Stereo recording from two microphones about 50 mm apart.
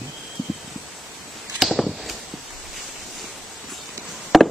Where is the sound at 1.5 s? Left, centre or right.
Centre.